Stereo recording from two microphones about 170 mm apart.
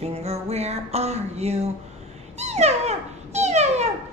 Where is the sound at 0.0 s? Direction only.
40° right (ahead or behind).